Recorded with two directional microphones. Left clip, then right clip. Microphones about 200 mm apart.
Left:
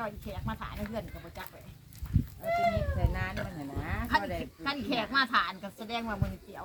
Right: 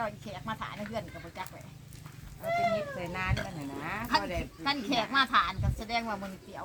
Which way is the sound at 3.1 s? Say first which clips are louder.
Right 3 dB; 20° right (ahead or behind).